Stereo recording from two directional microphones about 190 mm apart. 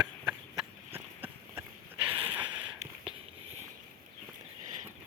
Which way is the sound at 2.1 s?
25° right (ahead or behind).